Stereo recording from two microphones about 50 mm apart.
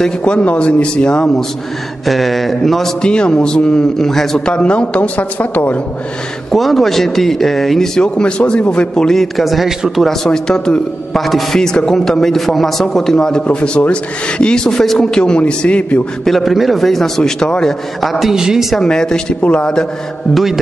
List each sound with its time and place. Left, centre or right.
0.2 s a woman's voice: left
2.0 s a man's voice: centre
3.0 s a man's voice: centre
4.5 s a woman's voice: left
6.5 s a man's voice: centre
8.0 s a man's voice: centre
10.0 s a man's voice: centre
13.4 s a man's voice: left
16.3 s a man's voice: centre
18.2 s speech: centre
18.8 s a man's voice: centre